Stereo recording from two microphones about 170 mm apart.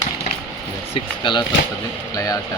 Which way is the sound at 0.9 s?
30° left (ahead or behind).